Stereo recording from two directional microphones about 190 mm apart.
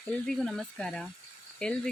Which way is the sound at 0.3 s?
5° left (ahead or behind).